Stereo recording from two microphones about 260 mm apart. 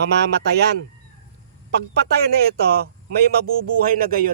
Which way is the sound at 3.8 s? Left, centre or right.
Right.